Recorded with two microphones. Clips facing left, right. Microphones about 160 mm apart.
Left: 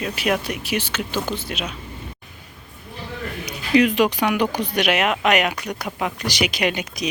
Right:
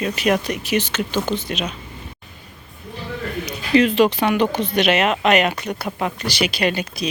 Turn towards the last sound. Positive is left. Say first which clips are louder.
# right 2 dB
turn(degrees=15)  # may be behind; listen again after turning